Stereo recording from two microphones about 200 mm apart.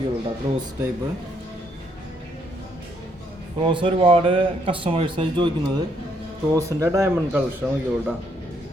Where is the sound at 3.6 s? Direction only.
25° right (ahead or behind).